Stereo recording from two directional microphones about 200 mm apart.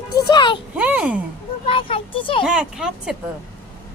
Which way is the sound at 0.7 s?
5° right (ahead or behind).